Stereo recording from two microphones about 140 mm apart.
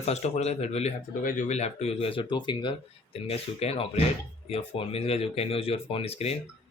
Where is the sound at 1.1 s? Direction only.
75° left (ahead or behind); by 2.7 s 35° left (ahead or behind).